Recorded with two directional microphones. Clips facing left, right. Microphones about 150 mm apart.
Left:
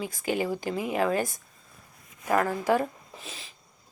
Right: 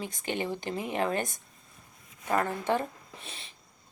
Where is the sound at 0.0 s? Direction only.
30° right (ahead or behind).